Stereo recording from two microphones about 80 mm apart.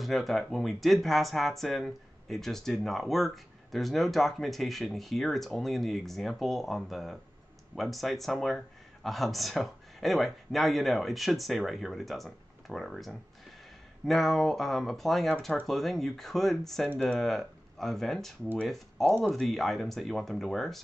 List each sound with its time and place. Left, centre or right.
0.0 s speech: centre